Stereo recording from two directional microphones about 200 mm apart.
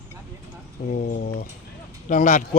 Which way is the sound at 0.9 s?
45° left (ahead or behind).